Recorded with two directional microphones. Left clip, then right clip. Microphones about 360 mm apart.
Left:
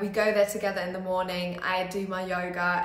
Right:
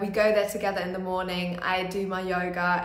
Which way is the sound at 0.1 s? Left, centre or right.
Centre.